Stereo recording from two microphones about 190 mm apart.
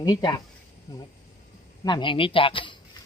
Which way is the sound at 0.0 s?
20° left (ahead or behind).